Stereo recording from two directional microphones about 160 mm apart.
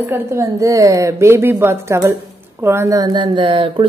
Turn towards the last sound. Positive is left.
turn(degrees=-30)  # may be behind; listen again after turning